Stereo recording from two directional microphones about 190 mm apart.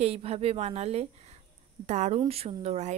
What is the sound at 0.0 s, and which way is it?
Speech, 30° right (ahead or behind).